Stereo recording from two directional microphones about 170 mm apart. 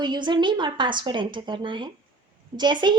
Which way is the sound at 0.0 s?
25° right (ahead or behind).